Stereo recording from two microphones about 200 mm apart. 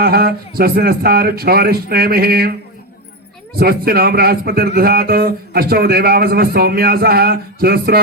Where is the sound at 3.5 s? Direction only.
50° right (ahead or behind).